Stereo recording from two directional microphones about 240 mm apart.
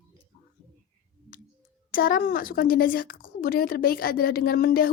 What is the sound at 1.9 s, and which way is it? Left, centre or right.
A woman's voice, left.